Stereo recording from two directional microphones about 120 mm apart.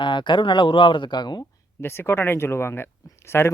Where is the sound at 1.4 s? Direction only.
20° left (ahead or behind).